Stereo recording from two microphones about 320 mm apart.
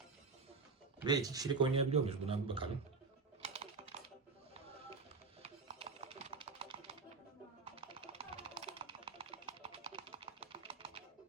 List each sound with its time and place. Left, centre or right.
0.9 s speech: centre
3.4 s typing: centre
5.4 s music: centre
7.6 s a sound: centre